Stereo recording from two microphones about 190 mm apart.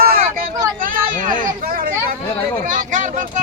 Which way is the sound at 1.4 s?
50° right (ahead or behind).